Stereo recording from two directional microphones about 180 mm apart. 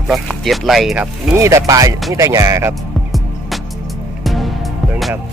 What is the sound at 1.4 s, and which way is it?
Speech, 15° right (ahead or behind).